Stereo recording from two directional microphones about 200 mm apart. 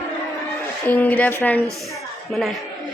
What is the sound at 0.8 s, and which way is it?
Speech, 10° left (ahead or behind).